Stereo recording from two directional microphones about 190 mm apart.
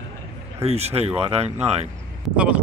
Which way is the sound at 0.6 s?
35° right (ahead or behind).